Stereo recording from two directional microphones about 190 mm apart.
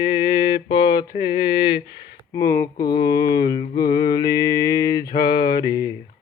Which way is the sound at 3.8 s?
20° left (ahead or behind).